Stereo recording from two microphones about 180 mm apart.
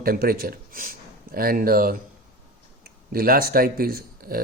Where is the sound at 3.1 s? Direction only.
55° right (ahead or behind).